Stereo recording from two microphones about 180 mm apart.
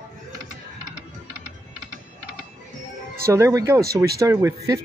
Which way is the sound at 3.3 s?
15° right (ahead or behind).